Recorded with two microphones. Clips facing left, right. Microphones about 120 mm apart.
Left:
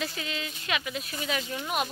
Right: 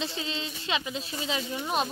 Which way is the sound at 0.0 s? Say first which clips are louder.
Right 1 dB; 25° right (ahead or behind).